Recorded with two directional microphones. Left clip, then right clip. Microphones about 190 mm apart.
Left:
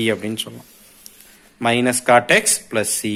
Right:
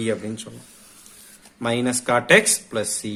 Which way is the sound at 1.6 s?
20° left (ahead or behind).